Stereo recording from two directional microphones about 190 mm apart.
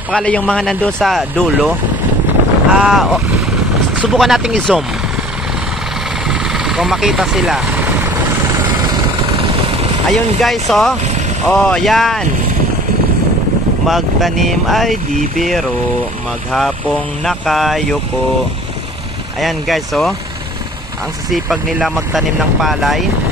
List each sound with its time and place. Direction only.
0.1 s speech: 5° left (ahead or behind)
2.7 s speech: centre (ahead or behind)
6.2 s vehicle: 5° right (ahead or behind); by 9.8 s 30° right (ahead or behind)
10.1 s speech: centre (ahead or behind)
11.1 s vehicle: 35° right (ahead or behind)
11.4 s speech: 5° left (ahead or behind)
13.8 s speech: centre (ahead or behind)
19.4 s speech: centre (ahead or behind)
21.3 s speech: centre (ahead or behind)